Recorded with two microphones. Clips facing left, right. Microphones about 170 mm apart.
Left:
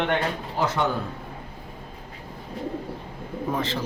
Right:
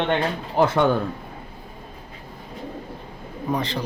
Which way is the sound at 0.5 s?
55° right (ahead or behind).